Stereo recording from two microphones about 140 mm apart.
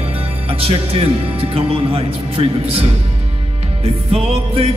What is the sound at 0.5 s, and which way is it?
Music, 45° right (ahead or behind).